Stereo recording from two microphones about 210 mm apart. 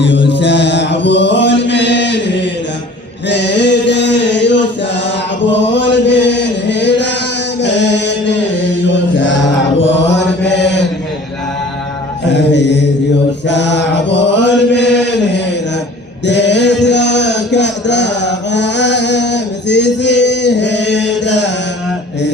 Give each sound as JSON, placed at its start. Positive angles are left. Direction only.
{"t": 0.0, "sound": "mantra", "side_deg": 60}
{"t": 3.2, "sound": "male singing", "side_deg": 55}
{"t": 5.0, "sound": "chant", "side_deg": 60}
{"t": 12.3, "sound": "mantra", "side_deg": 55}
{"t": 13.5, "sound": "chant", "side_deg": 55}
{"t": 16.2, "sound": "a sound", "side_deg": 55}